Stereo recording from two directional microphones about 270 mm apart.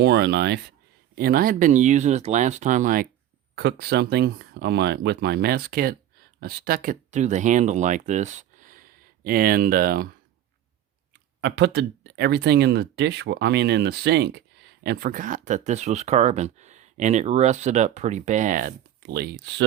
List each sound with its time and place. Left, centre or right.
0.0 s speech: right
11.3 s speech: right